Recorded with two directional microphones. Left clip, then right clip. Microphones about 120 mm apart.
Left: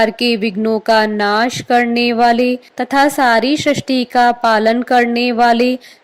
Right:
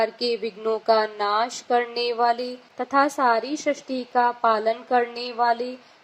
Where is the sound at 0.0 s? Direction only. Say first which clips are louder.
Left 9 dB; 40° left (ahead or behind).